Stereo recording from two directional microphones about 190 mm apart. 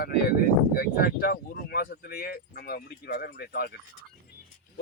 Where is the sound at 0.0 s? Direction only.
50° left (ahead or behind).